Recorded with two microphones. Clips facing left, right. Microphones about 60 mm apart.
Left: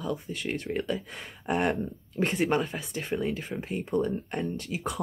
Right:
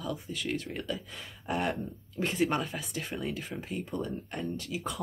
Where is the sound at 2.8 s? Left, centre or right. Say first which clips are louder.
Left 5 dB; centre.